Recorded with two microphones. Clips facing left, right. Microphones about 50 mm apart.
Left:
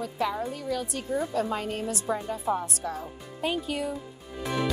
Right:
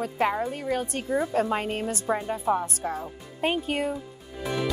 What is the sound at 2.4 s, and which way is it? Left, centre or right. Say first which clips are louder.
Speech: right 4 dB; right.